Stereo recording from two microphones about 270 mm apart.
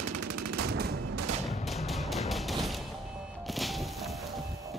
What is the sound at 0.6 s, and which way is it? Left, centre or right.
Gunshot, right.